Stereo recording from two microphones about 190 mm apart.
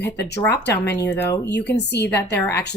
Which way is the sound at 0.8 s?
10° left (ahead or behind).